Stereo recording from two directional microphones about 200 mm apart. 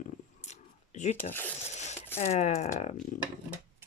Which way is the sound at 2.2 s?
35° left (ahead or behind).